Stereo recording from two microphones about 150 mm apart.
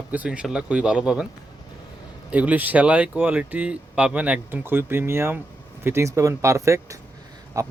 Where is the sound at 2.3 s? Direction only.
10° right (ahead or behind).